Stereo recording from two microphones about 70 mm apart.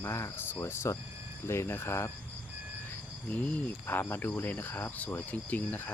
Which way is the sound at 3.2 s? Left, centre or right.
Left.